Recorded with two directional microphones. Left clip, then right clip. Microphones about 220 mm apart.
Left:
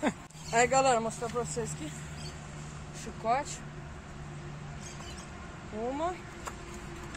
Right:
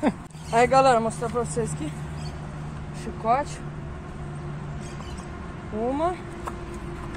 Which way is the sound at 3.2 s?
15° left (ahead or behind).